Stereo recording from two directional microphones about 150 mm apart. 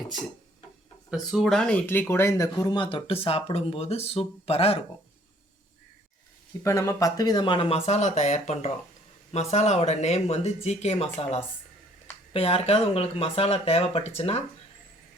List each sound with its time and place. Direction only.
1.1 s speech: centre (ahead or behind); by 4.8 s 40° left (ahead or behind)
6.6 s speech: 20° left (ahead or behind); by 14.4 s 45° left (ahead or behind)